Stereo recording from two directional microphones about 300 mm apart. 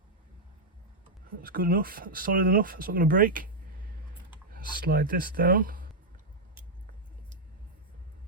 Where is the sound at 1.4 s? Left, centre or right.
Right.